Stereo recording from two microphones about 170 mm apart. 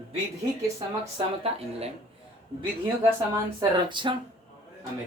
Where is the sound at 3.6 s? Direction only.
30° right (ahead or behind).